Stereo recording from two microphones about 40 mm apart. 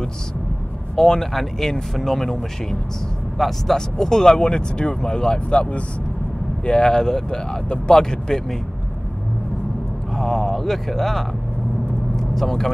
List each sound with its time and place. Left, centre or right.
0.9 s speech: centre
3.7 s speech: centre
10.1 s speech: centre